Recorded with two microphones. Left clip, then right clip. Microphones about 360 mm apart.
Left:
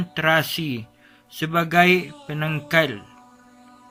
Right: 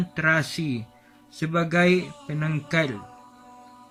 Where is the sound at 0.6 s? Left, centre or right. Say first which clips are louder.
Left 2 dB; left.